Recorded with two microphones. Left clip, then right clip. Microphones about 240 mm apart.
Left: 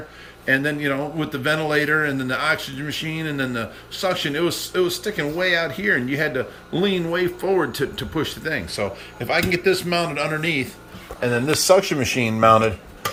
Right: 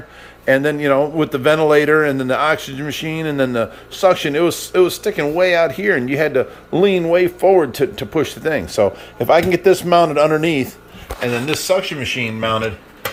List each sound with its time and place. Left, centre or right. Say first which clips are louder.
0.4 s a man's voice: right 6 dB; centre
11.4 s a man's voice: left 3 dB; centre